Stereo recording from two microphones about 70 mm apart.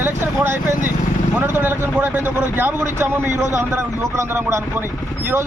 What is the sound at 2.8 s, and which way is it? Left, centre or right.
A man's voice, right.